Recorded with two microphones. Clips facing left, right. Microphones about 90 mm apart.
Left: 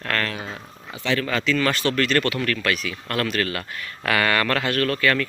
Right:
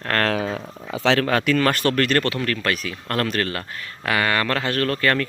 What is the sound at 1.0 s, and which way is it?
Speech, 90° right.